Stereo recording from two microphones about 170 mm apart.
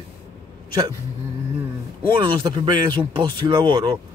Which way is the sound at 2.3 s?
25° right (ahead or behind).